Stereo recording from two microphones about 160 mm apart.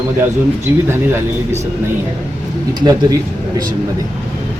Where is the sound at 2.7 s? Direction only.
25° right (ahead or behind).